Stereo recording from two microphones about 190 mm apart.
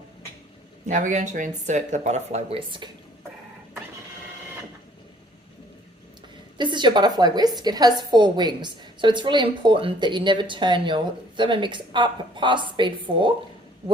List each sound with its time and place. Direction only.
0.9 s speech: 40° right (ahead or behind)
6.6 s a woman's voice: 25° right (ahead or behind)